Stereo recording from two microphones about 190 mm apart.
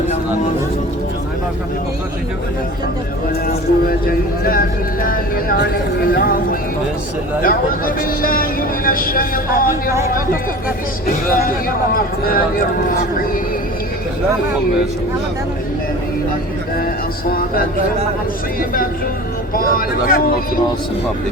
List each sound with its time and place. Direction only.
3.4 s speech: 50° left (ahead or behind)
11.9 s speech: 50° left (ahead or behind)
19.5 s speech: 50° left (ahead or behind)